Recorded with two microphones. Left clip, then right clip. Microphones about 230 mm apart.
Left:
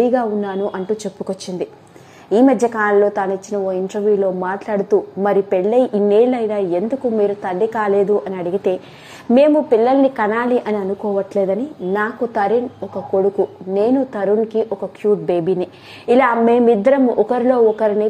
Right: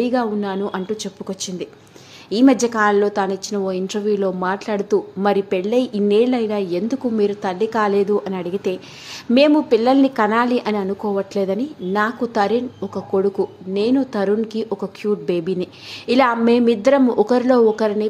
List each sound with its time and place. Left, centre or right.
0.0 s a woman's voice: centre